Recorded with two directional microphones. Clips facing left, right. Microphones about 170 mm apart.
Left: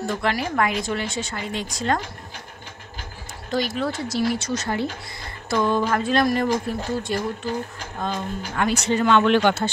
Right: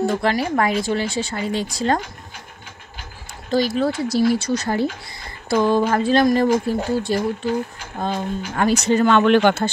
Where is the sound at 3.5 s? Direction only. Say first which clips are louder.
Right 5 dB; 35° right (ahead or behind).